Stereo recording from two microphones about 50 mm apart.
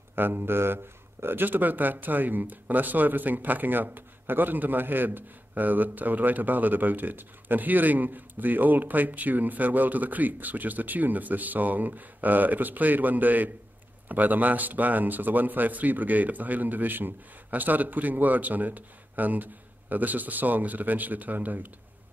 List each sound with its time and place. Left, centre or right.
0.1 s speech: right